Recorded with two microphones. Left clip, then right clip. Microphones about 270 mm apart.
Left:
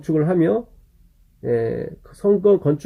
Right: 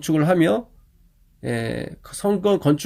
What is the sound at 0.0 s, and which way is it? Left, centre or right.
Speech, right.